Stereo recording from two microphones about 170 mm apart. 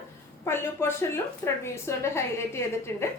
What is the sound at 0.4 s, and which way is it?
A woman's voice, 15° left (ahead or behind).